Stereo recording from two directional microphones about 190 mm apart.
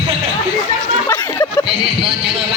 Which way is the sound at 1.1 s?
15° left (ahead or behind).